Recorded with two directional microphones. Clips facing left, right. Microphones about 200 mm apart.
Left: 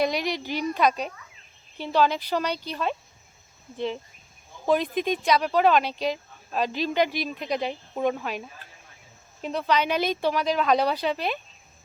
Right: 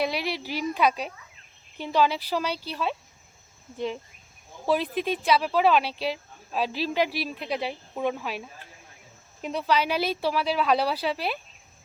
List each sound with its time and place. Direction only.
0.0 s a woman's voice: 5° right (ahead or behind)
4.7 s a woman's voice: 5° right (ahead or behind)